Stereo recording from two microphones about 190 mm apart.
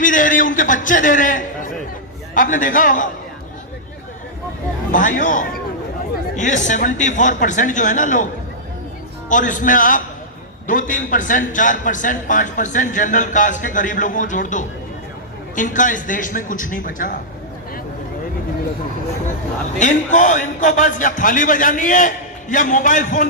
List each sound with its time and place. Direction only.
0.0 s a man's voice: 45° left (ahead or behind)
4.9 s a man's voice: 45° left (ahead or behind)
9.3 s a man's voice: 40° left (ahead or behind)
19.8 s a man's voice: 40° left (ahead or behind)